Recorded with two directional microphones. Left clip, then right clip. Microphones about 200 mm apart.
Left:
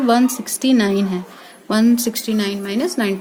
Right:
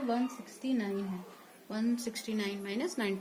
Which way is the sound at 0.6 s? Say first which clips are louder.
Left 18 dB; 45° left (ahead or behind).